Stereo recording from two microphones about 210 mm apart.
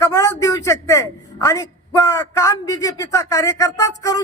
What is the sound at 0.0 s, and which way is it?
A man's voice, 15° left (ahead or behind).